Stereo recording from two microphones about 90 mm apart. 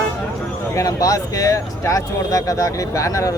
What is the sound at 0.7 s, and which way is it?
Speech, 40° left (ahead or behind).